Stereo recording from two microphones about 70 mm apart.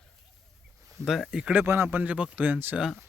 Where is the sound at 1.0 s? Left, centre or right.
Centre.